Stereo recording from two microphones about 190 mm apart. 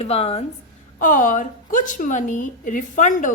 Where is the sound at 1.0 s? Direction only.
45° left (ahead or behind).